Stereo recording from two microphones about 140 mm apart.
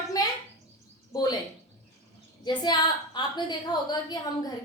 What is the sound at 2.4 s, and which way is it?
A woman's voice, 30° left (ahead or behind).